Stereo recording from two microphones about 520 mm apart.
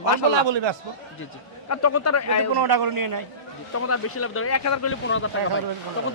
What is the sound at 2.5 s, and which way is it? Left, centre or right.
Speech, right.